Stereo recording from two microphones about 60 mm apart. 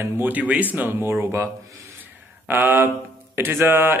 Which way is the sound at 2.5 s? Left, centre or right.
Right.